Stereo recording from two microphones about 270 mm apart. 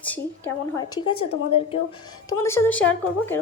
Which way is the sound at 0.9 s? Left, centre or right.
Left.